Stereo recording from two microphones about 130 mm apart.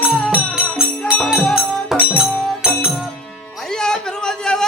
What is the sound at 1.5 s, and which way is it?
Music, 5° right (ahead or behind).